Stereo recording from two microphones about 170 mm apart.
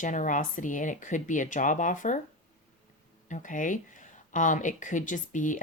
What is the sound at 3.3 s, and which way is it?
Speech, 50° left (ahead or behind).